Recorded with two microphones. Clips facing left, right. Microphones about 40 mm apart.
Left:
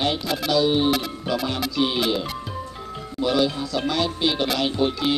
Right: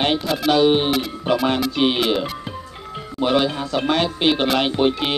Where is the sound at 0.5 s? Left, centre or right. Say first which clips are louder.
Right 4 dB; right.